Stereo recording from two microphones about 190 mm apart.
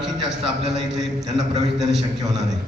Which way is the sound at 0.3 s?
Centre (ahead or behind).